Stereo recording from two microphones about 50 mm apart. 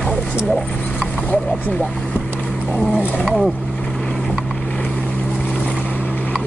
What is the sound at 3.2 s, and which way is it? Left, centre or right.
Speech, centre.